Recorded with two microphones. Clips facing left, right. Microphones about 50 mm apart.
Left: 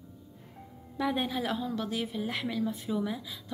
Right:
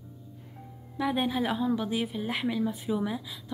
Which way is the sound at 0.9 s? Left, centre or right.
Centre.